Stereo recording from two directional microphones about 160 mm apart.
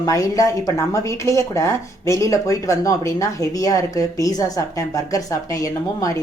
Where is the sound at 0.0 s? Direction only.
20° left (ahead or behind).